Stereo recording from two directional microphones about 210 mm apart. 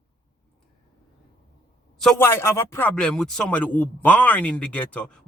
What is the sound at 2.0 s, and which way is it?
A man's voice, 5° left (ahead or behind).